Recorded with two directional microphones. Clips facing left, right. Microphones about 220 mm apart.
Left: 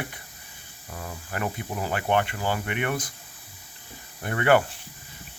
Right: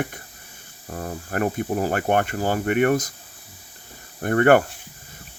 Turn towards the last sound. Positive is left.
turn(degrees=-50)  # may be behind; listen again after turning